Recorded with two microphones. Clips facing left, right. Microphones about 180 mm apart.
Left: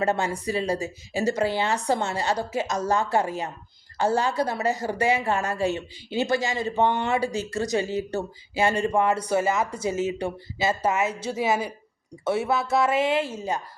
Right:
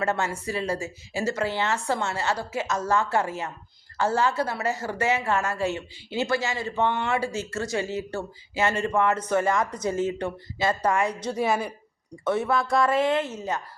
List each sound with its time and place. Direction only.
0.0 s a woman's voice: 15° left (ahead or behind)